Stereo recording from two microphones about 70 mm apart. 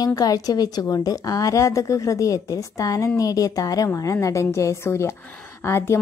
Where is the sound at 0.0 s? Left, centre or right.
Left.